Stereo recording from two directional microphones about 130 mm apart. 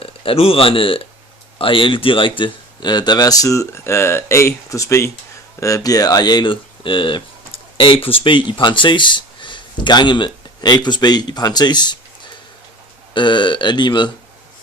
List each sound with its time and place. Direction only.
0.0 s speech: 45° left (ahead or behind)
13.1 s speech: 35° left (ahead or behind)